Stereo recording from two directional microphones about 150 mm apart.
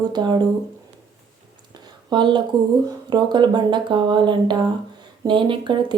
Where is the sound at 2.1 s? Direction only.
30° right (ahead or behind).